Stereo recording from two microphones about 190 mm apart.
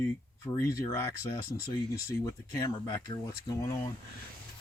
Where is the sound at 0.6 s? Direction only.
15° left (ahead or behind).